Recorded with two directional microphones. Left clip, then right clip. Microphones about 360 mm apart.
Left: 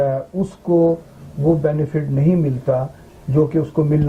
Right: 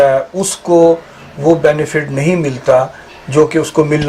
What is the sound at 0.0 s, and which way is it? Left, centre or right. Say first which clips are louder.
Speech: right 10 dB; centre.